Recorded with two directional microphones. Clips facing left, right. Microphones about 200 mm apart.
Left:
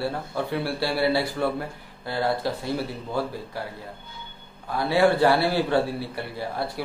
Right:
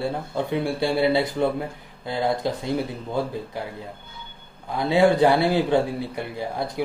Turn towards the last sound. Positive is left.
turn(degrees=-15)  # may be behind; listen again after turning